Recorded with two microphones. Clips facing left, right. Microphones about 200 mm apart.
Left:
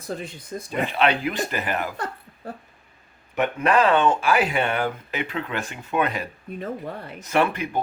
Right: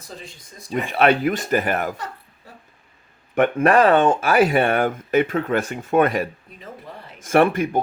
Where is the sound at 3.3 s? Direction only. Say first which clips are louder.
Right 5 dB; 50° right (ahead or behind).